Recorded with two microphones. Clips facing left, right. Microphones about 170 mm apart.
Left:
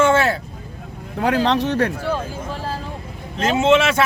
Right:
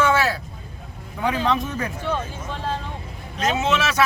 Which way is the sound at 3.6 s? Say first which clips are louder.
Left 9 dB; 25° left (ahead or behind).